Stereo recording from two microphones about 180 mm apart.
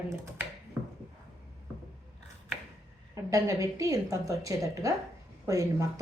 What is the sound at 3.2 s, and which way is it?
Speech, 15° right (ahead or behind).